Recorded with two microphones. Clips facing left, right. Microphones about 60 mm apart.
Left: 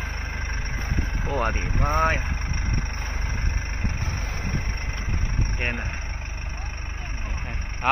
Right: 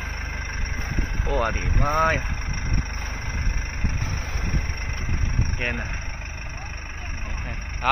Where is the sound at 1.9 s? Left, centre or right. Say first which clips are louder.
Right 2 dB; centre.